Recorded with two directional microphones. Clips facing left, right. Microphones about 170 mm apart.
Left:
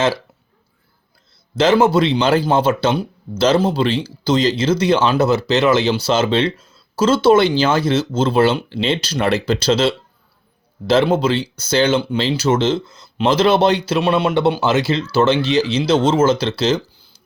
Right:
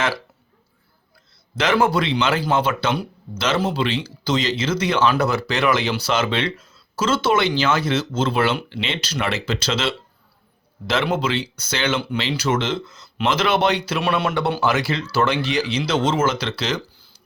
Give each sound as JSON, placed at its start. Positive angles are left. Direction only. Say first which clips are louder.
{"t": 1.5, "sound": "speech", "louder": "left 5 dB", "side_deg": 30}